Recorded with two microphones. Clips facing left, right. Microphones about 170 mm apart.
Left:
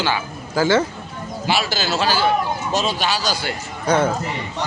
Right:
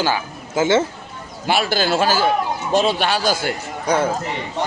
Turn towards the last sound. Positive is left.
turn(degrees=-10)  # may be behind; listen again after turning